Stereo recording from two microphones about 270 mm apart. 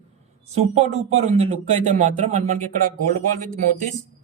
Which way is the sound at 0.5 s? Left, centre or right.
Right.